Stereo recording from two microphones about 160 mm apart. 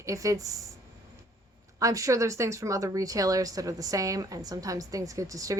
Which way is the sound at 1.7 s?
20° right (ahead or behind).